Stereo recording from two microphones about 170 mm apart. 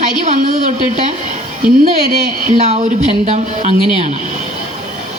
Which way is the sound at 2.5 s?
40° right (ahead or behind).